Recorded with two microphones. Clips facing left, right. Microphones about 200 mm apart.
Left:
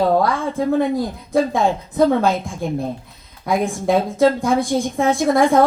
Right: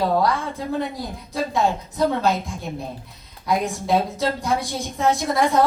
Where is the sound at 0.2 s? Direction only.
50° left (ahead or behind).